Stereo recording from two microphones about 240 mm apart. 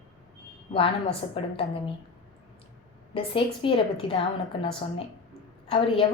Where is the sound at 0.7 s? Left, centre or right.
Left.